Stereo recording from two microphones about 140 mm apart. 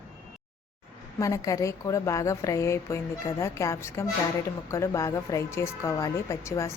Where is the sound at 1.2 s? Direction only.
25° left (ahead or behind).